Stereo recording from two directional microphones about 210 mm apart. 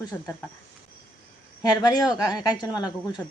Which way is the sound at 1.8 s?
20° left (ahead or behind).